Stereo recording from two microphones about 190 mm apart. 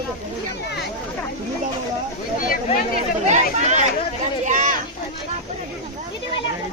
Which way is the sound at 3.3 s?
40° right (ahead or behind).